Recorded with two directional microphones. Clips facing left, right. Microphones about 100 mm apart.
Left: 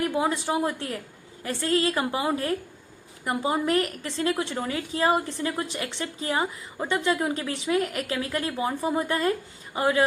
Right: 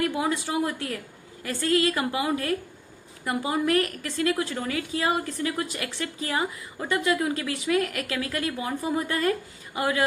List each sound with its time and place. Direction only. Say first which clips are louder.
0.0 s a woman's voice: left 1 dB; 25° left (ahead or behind)